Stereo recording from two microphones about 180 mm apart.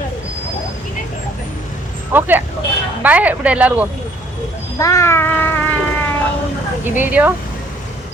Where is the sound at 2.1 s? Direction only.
10° right (ahead or behind).